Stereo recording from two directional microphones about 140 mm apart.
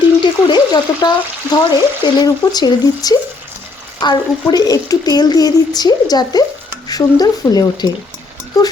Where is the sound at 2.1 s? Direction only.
30° left (ahead or behind).